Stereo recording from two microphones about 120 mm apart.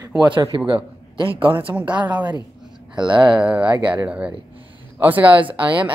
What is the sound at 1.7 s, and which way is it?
Speech, 10° right (ahead or behind).